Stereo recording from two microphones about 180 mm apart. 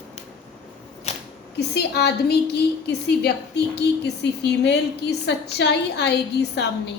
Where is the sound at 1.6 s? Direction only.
65° left (ahead or behind).